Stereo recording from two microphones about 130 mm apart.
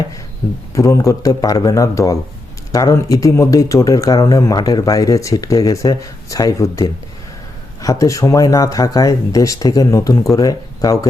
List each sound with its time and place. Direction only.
0.7 s speech: 25° left (ahead or behind)